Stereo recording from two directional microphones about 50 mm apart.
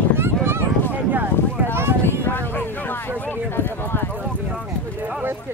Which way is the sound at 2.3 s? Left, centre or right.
Left.